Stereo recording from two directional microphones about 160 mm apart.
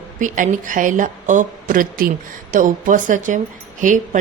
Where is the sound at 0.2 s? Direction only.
55° right (ahead or behind).